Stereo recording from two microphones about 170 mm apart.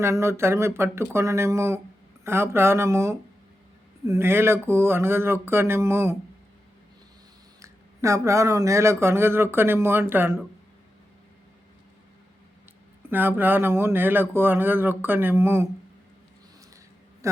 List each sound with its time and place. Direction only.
0.0 s speech: 15° right (ahead or behind)
7.6 s speech: 20° right (ahead or behind)
13.1 s speech: 10° right (ahead or behind)